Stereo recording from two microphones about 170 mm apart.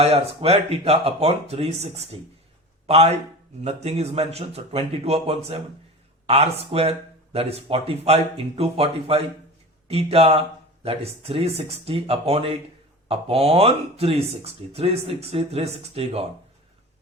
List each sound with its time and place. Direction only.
0.0 s speech: 35° right (ahead or behind)